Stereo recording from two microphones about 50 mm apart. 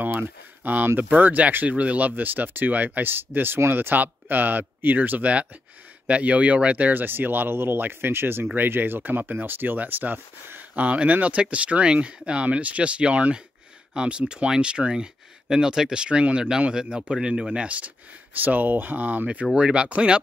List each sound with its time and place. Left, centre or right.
0.0 s a sound: right
0.8 s speech: right
6.9 s speech: right
10.7 s speech: right
19.5 s speech: right